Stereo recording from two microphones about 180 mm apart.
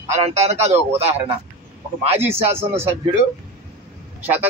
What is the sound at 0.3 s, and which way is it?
A man's voice, 35° right (ahead or behind).